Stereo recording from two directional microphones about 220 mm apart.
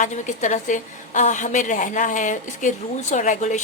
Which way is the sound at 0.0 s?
35° left (ahead or behind).